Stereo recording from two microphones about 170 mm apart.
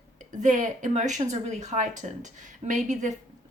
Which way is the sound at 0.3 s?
45° right (ahead or behind).